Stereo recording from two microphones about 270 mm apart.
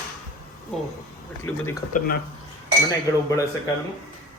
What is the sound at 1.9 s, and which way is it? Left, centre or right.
Speech, left.